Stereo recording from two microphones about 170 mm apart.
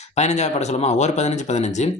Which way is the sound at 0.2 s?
40° left (ahead or behind).